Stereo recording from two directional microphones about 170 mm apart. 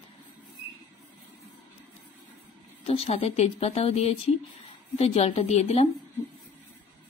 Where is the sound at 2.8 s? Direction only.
35° left (ahead or behind).